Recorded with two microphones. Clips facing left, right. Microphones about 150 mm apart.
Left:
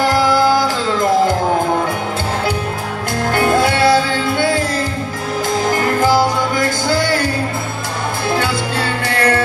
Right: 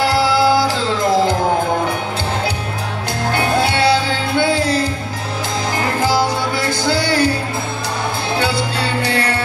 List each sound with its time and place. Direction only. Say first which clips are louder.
3.3 s music: left 3 dB; 45° left (ahead or behind)
8.7 s music: even; 45° left (ahead or behind)